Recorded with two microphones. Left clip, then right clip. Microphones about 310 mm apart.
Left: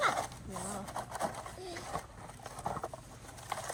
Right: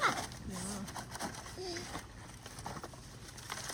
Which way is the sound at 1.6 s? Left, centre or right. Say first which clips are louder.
Right 1 dB; centre.